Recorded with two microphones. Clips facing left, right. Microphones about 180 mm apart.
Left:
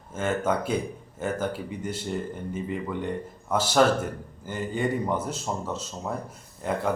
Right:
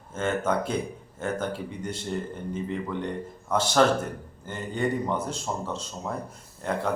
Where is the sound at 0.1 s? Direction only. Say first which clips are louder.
Even; 10° left (ahead or behind).